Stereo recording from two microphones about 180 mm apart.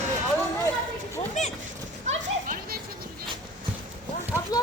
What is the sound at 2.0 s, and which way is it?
Children playing, 50° right (ahead or behind).